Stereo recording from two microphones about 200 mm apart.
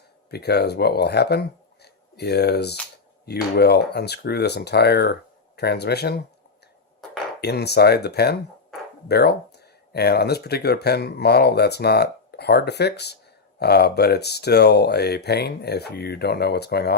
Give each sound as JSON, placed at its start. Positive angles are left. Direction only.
{"t": 0.3, "sound": "speech", "side_deg": 55}
{"t": 7.4, "sound": "speech", "side_deg": 55}